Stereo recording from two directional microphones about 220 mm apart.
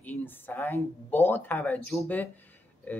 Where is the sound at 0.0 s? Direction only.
10° left (ahead or behind).